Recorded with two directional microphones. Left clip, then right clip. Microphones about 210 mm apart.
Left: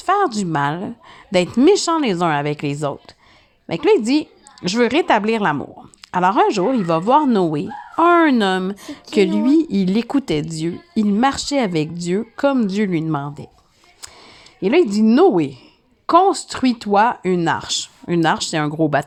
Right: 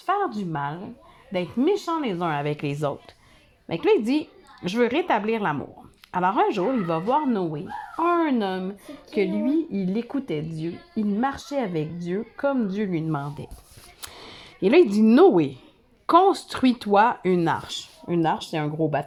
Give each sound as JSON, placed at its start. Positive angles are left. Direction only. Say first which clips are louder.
{"t": 0.0, "sound": "a woman's voice", "louder": "left 7 dB", "side_deg": 35}